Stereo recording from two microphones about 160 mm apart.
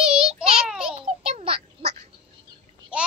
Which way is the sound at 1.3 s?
40° right (ahead or behind).